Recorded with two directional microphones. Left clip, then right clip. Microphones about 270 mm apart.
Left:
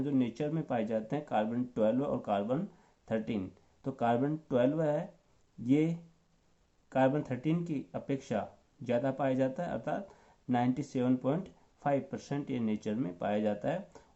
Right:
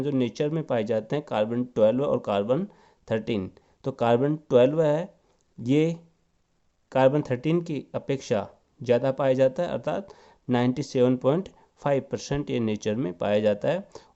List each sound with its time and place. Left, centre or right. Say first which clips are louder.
0.0 s speech: right 7 dB; right